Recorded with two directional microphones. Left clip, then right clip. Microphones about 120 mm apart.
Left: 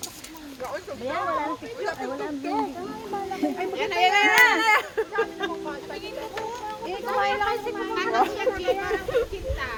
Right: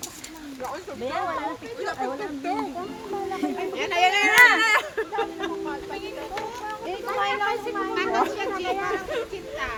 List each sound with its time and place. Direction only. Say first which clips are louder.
1.8 s speech: right 2 dB; 10° right (ahead or behind)
3.8 s speech: even; 20° right (ahead or behind)
6.3 s children playing: right 2 dB; centre (ahead or behind)
7.1 s speech: left 1 dB; 5° right (ahead or behind)